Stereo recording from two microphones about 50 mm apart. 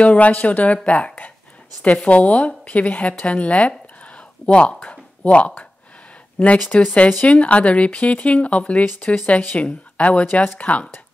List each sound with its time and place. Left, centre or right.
0.0 s speech: left
10.2 s speech: left